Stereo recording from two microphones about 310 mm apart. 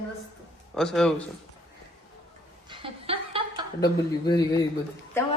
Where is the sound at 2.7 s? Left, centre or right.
Centre.